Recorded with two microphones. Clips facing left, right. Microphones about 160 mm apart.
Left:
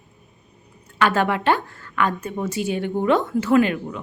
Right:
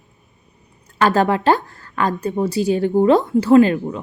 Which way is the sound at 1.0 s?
35° right (ahead or behind).